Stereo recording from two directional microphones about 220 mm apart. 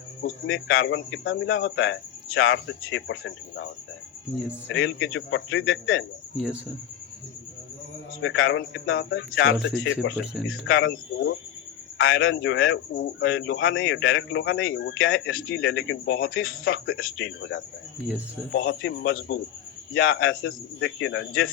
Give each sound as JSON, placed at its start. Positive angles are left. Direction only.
{"t": 0.2, "sound": "a man's voice", "side_deg": 60}
{"t": 4.7, "sound": "a man's voice", "side_deg": 60}
{"t": 8.2, "sound": "a man's voice", "side_deg": 60}
{"t": 11.9, "sound": "a man's voice", "side_deg": 65}